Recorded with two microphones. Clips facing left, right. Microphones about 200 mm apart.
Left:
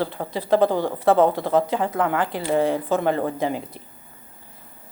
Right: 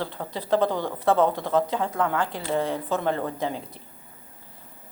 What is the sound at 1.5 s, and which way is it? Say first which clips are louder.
Speech: left 3 dB; 10° left (ahead or behind).